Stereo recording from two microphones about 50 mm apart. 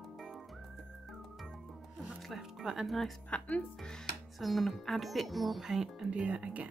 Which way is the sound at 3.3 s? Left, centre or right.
Left.